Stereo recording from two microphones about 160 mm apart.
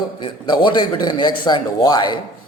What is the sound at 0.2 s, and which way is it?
A man's voice, 30° left (ahead or behind).